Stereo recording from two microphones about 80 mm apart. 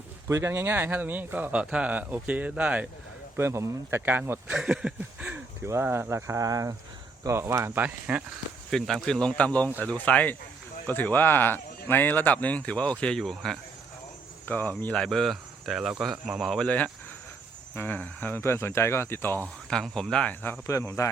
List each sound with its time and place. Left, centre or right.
0.3 s speech: right; by 2.8 s centre
3.3 s speech: right
4.0 s speech: right
4.5 s a sound: centre
5.6 s speech: right
6.4 s speech: right
7.9 s a sound: centre
8.7 s speech: centre
14.4 s speech: left
15.0 s speech: centre
16.6 s speech: centre
19.7 s speech: centre
20.7 s a man's voice: left